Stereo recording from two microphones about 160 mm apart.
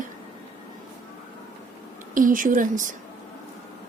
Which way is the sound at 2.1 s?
55° right (ahead or behind).